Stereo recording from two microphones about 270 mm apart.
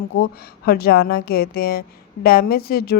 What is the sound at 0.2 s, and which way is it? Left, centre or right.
A woman's voice, left.